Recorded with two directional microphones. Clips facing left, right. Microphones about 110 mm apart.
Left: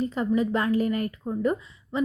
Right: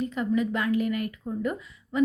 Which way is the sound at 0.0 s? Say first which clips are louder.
Left 2 dB; 35° left (ahead or behind).